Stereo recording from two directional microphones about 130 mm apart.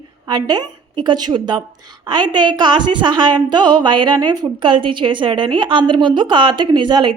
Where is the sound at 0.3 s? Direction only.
35° right (ahead or behind).